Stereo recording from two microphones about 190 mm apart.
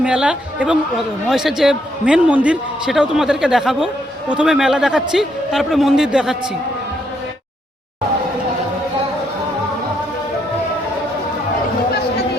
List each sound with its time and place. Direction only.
0.0 s speech: 5° right (ahead or behind)